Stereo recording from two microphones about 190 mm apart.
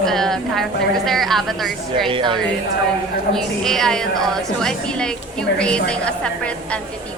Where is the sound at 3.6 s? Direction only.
Centre (ahead or behind).